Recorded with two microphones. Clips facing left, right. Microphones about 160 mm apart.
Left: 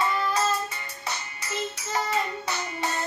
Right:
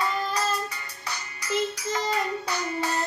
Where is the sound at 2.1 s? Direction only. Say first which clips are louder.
Right 1 dB; 20° left (ahead or behind).